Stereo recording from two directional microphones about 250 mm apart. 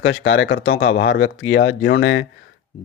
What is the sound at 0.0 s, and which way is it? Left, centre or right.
Speech, left.